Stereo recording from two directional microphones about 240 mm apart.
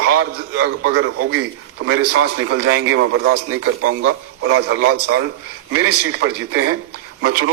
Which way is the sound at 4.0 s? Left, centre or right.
Right.